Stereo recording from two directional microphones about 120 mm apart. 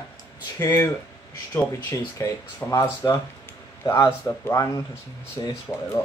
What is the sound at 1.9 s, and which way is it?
Speech, 25° left (ahead or behind).